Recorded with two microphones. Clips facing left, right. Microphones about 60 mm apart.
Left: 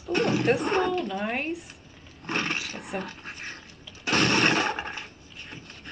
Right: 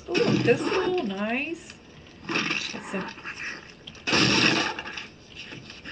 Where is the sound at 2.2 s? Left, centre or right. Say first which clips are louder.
Right 1 dB; centre.